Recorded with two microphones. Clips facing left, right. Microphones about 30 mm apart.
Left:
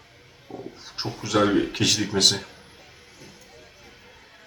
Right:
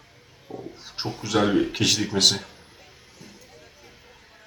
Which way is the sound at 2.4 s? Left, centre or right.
Centre.